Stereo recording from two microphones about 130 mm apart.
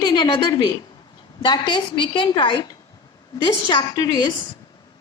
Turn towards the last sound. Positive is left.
turn(degrees=30)  # may be behind; listen again after turning